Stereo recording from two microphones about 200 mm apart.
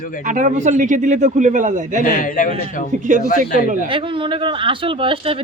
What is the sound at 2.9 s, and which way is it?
Speech, 40° right (ahead or behind).